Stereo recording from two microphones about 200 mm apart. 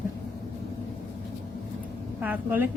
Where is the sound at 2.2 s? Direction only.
10° right (ahead or behind).